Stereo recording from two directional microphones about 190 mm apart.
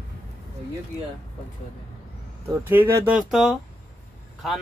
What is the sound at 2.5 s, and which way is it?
Speech, 10° right (ahead or behind).